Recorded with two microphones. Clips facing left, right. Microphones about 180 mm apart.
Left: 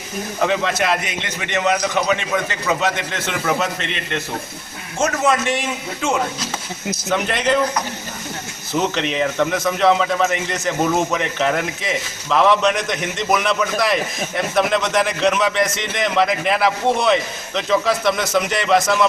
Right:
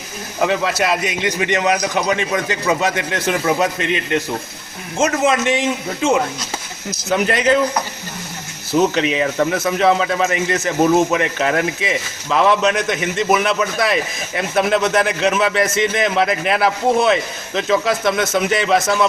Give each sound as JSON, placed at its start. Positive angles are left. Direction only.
{"t": 0.4, "sound": "a man's voice", "side_deg": -5}
{"t": 4.9, "sound": "a man's voice", "side_deg": -20}
{"t": 7.1, "sound": "speech", "side_deg": -5}
{"t": 8.7, "sound": "speech", "side_deg": -5}